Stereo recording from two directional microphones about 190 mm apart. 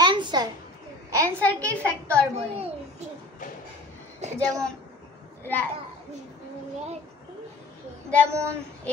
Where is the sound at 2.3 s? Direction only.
35° right (ahead or behind).